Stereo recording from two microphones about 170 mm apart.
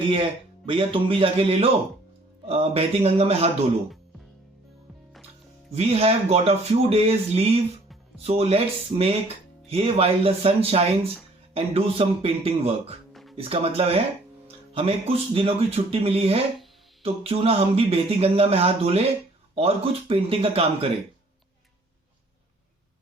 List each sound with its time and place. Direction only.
0.1 s speech: 30° right (ahead or behind)
5.7 s speech: 35° right (ahead or behind)